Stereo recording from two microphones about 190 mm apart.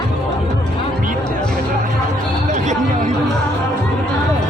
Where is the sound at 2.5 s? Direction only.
40° right (ahead or behind).